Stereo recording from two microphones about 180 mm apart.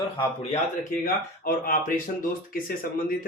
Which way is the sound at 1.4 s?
50° left (ahead or behind).